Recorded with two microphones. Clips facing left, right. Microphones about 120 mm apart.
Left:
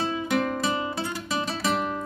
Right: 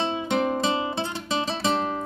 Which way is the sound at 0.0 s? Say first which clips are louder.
Right 1 dB; 25° right (ahead or behind).